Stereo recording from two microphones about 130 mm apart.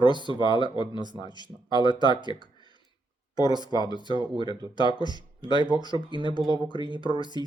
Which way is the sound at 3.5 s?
35° right (ahead or behind).